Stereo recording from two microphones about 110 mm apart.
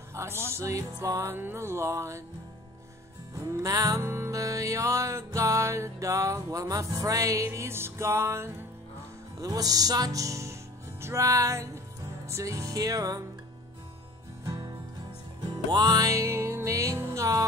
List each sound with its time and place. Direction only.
0.1 s music: 25° right (ahead or behind)
3.3 s music: 30° right (ahead or behind)
9.4 s music: 35° right (ahead or behind)
14.4 s music: 30° right (ahead or behind)